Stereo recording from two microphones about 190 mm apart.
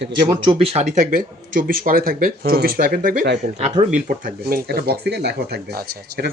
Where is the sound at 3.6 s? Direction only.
35° right (ahead or behind).